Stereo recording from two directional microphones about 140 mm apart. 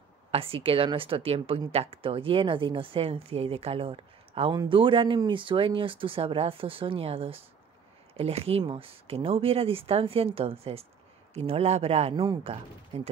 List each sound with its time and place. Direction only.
0.3 s speech: 40° right (ahead or behind)